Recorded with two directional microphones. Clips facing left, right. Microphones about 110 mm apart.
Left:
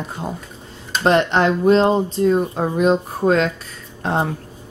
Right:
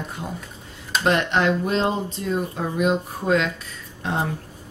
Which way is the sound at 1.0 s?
35° left (ahead or behind).